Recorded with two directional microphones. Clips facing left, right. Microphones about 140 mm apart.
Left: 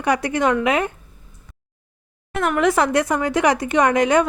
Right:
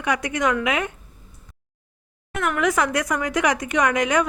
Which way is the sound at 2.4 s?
30° left (ahead or behind).